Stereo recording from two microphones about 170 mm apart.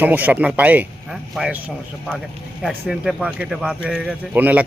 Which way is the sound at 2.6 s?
5° right (ahead or behind).